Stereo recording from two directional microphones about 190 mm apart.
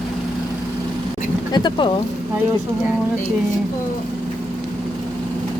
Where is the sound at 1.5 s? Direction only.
25° left (ahead or behind).